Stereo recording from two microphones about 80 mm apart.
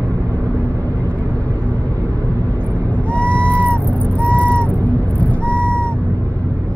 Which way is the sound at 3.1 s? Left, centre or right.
Centre.